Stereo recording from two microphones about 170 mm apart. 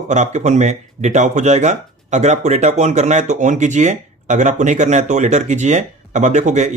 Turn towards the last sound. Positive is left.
turn(degrees=-45)  # may be behind; listen again after turning